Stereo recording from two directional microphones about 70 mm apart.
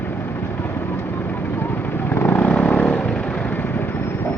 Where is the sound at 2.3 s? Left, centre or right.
Left.